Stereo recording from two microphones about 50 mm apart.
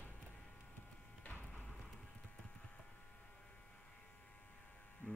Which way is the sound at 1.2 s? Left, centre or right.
Left.